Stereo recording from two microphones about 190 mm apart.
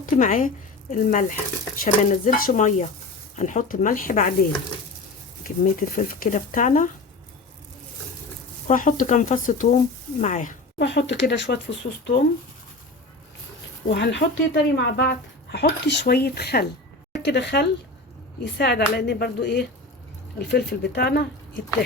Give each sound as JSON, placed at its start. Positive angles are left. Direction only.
{"t": 0.0, "sound": "speech", "side_deg": 45}
{"t": 5.4, "sound": "speech", "side_deg": 45}
{"t": 8.6, "sound": "speech", "side_deg": 45}
{"t": 10.8, "sound": "speech", "side_deg": 65}
{"t": 13.9, "sound": "speech", "side_deg": 65}